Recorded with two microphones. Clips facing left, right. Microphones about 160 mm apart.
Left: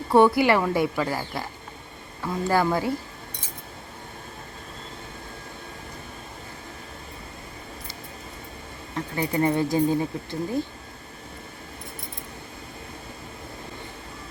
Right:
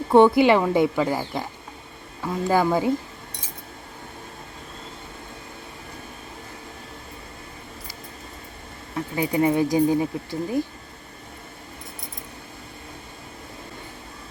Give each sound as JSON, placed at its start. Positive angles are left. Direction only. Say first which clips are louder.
{"t": 0.1, "sound": "speech", "louder": "right 3 dB", "side_deg": -20}
{"t": 9.1, "sound": "speech", "louder": "right 3 dB", "side_deg": -15}